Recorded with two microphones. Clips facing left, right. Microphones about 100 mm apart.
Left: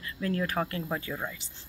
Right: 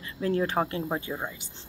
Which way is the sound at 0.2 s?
30° right (ahead or behind).